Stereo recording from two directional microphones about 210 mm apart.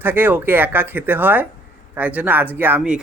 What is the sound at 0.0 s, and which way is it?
Speech, 10° right (ahead or behind).